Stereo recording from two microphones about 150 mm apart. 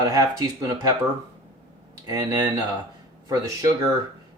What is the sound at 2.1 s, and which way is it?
Speech, 25° right (ahead or behind).